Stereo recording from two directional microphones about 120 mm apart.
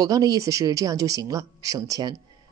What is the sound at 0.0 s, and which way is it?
Speech, 30° right (ahead or behind).